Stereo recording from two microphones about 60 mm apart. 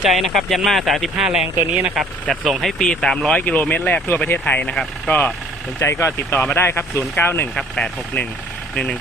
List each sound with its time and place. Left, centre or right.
0.0 s speech: centre
2.2 s speech: centre
3.3 s speech: left
5.8 s speech: left
6.4 s speech: left
7.5 s speech: centre